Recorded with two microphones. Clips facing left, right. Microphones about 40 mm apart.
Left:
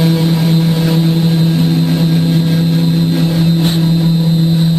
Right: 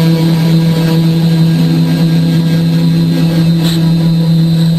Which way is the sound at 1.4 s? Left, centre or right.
Centre.